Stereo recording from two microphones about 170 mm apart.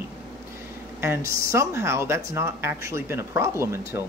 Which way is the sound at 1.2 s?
60° left (ahead or behind).